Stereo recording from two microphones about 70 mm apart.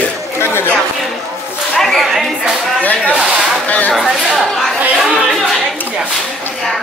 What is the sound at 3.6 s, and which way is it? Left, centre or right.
Speech, left.